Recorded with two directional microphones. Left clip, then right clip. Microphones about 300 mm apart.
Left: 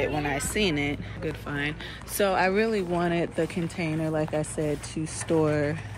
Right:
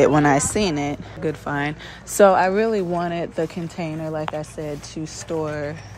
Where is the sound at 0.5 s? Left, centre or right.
Centre.